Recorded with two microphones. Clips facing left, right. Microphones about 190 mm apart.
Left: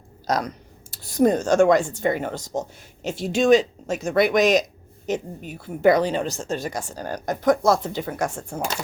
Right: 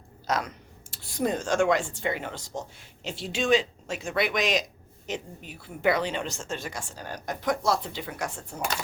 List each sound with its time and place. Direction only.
0.3 s speech: 40° left (ahead or behind)